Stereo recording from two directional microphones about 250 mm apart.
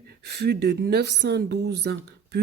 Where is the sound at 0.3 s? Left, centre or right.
Right.